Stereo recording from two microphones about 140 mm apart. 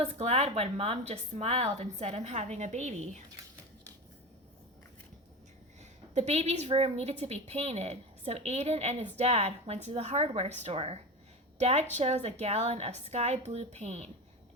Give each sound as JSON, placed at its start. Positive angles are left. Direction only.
{"t": 0.0, "sound": "a woman's voice", "side_deg": -50}
{"t": 6.1, "sound": "a woman's voice", "side_deg": -50}